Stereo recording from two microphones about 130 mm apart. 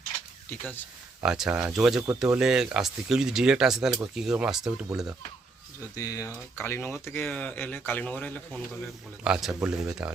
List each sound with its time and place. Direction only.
0.6 s speech: 15° left (ahead or behind)
1.2 s speech: 5° right (ahead or behind)
6.0 s speech: 25° left (ahead or behind); by 8.6 s 10° left (ahead or behind)
9.2 s speech: 5° right (ahead or behind)